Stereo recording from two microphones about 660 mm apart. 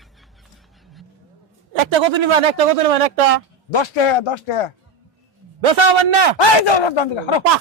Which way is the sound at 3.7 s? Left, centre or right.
Left.